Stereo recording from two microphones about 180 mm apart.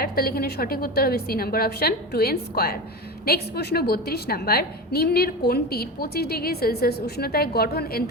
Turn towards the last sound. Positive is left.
turn(degrees=60)  # may be behind; listen again after turning